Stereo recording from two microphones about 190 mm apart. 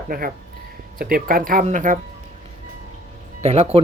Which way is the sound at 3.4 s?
30° right (ahead or behind).